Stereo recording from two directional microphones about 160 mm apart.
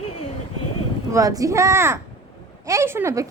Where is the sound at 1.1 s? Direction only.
20° right (ahead or behind).